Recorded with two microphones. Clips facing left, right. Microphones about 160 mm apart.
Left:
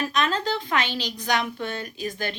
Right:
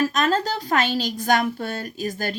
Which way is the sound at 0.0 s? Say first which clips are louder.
Right 4 dB; 45° right (ahead or behind).